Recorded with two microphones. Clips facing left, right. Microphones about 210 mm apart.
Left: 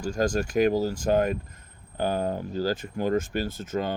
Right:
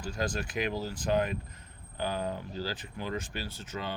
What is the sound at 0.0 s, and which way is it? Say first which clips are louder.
Speech: left 8 dB; 45° left (ahead or behind).